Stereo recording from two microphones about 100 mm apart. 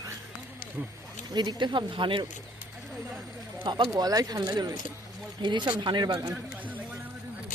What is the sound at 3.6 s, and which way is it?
Speech, 55° right (ahead or behind).